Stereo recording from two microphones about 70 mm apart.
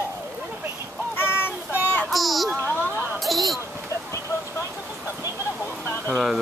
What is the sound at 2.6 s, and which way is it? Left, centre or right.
Speech, left.